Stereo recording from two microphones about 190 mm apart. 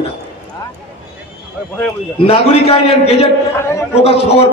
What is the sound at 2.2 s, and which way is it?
A man's voice, 30° left (ahead or behind).